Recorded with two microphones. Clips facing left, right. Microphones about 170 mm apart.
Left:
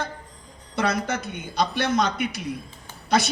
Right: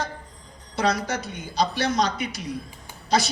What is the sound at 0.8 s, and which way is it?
A man's voice, 55° left (ahead or behind).